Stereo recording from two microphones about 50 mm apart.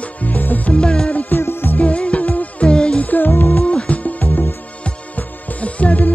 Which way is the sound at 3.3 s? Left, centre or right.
Left.